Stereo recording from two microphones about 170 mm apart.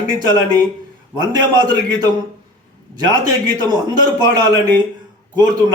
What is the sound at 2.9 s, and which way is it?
A man's voice, 25° right (ahead or behind).